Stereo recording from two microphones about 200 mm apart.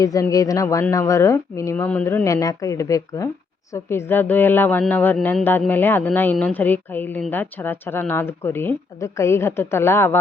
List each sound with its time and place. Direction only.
0.0 s speech: 15° left (ahead or behind)